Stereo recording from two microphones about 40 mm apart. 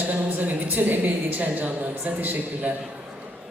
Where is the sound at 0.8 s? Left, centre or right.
Right.